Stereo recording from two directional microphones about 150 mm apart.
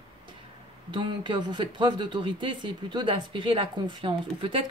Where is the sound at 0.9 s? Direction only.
30° right (ahead or behind).